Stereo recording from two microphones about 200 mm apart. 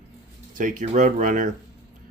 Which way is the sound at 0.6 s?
40° right (ahead or behind).